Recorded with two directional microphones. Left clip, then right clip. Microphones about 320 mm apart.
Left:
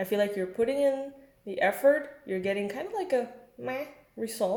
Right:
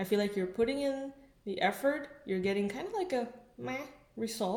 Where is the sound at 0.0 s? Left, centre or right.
Right.